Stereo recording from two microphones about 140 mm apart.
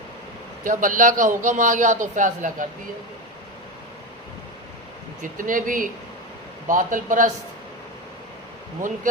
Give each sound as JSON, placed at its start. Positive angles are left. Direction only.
{"t": 0.6, "sound": "a man's voice", "side_deg": -75}
{"t": 5.2, "sound": "a man's voice", "side_deg": -70}